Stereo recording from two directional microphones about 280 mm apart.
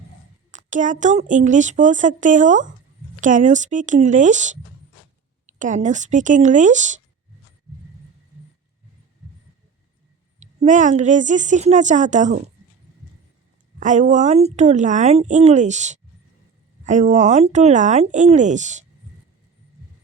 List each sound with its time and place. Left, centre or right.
0.5 s speech: right
10.4 s speech: right
13.7 s speech: right